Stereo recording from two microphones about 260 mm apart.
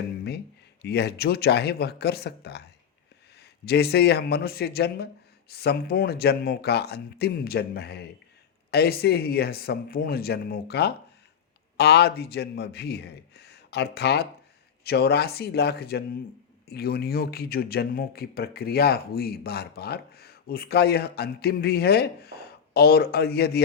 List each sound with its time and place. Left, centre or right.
0.3 s speech: left